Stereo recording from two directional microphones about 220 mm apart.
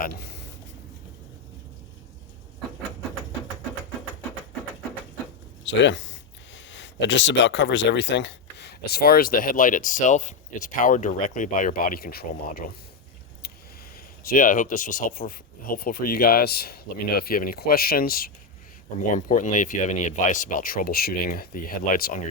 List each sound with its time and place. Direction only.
5.6 s speech: 55° left (ahead or behind)
13.9 s speech: 40° left (ahead or behind)